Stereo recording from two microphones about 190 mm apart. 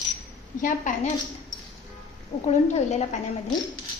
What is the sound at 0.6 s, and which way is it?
Speech, 45° left (ahead or behind).